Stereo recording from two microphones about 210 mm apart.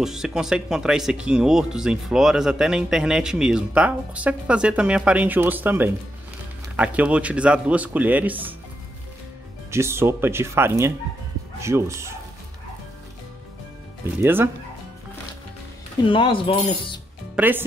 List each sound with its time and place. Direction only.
0.0 s speech: 5° right (ahead or behind)
9.7 s speech: 10° right (ahead or behind)
14.2 s speech: 10° right (ahead or behind)
16.1 s speech: 25° left (ahead or behind)
17.4 s speech: 10° right (ahead or behind)